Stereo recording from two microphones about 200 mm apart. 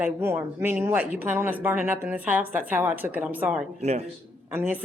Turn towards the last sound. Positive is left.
turn(degrees=-10)  # may be behind; listen again after turning